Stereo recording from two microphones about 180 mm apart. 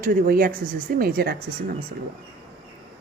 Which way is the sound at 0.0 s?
50° right (ahead or behind).